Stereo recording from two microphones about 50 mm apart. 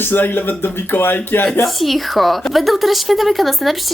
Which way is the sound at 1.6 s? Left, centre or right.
Centre.